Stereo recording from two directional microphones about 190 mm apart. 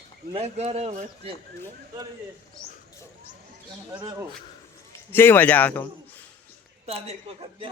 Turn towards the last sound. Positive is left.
turn(degrees=-35)  # may be behind; listen again after turning